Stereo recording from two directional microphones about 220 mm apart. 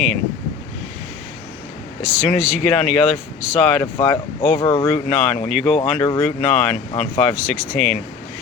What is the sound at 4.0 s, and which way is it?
Speech, 15° left (ahead or behind).